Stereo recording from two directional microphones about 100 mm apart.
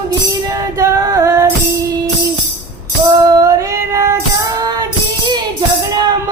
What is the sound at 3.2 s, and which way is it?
Female singing, 35° right (ahead or behind).